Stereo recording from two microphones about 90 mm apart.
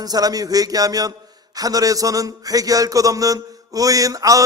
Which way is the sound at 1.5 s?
45° right (ahead or behind).